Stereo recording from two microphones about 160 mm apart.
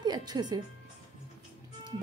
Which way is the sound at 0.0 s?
25° right (ahead or behind).